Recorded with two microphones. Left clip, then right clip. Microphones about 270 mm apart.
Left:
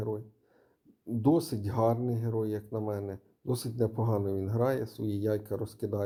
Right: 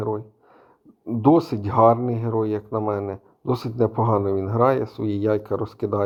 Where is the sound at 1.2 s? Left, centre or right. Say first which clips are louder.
Right 10 dB; centre.